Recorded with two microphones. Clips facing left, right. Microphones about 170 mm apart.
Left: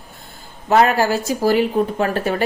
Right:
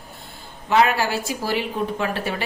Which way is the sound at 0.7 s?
45° left (ahead or behind).